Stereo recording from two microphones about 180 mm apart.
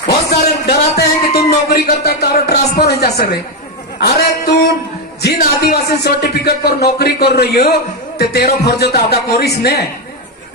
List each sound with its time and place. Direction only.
0.7 s music: 60° left (ahead or behind)
4.0 s a man's voice: 60° left (ahead or behind)